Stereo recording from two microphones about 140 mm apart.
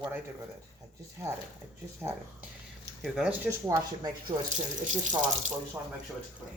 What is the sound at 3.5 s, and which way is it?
Speech, 25° right (ahead or behind).